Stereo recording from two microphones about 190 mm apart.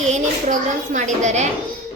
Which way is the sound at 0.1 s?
40° right (ahead or behind).